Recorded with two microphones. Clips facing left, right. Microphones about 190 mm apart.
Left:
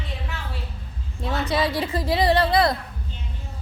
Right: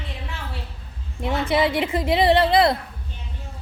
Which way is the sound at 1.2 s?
25° right (ahead or behind).